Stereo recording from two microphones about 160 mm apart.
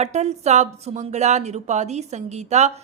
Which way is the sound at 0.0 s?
45° right (ahead or behind).